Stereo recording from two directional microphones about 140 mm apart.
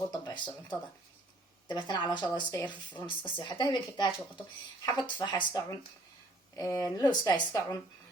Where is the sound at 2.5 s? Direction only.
10° left (ahead or behind).